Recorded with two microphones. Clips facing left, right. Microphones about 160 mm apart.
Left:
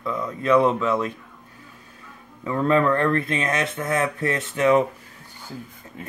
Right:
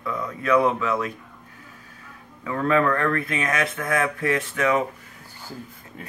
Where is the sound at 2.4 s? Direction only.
25° left (ahead or behind).